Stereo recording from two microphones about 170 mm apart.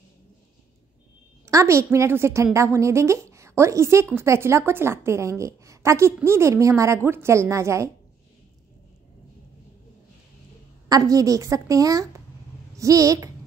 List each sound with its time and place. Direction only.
1.4 s a woman's voice: 20° right (ahead or behind)
10.9 s a woman's voice: 20° right (ahead or behind)